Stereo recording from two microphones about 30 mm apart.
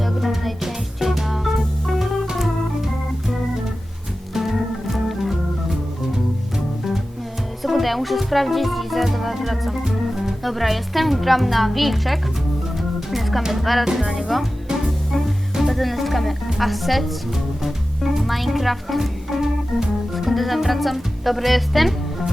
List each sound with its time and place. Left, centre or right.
0.0 s music: centre
2.2 s organ: centre
4.4 s organ: centre
7.6 s speech: centre
12.7 s music: centre
13.5 s speech: centre
13.8 s speech: centre
14.7 s music: centre
15.7 s speech: centre
17.3 s music: centre
18.9 s speech: centre
19.7 s organ: centre
20.3 s speech: centre